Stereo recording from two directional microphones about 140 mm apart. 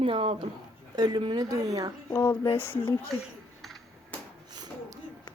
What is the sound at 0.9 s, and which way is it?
Speech, 30° right (ahead or behind).